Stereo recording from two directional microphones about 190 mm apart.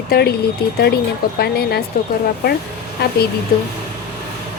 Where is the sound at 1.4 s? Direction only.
55° left (ahead or behind).